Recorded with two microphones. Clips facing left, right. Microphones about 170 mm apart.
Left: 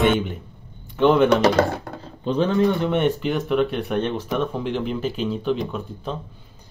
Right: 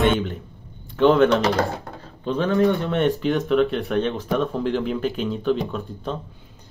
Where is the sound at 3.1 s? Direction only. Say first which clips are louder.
Right 2 dB; centre (ahead or behind).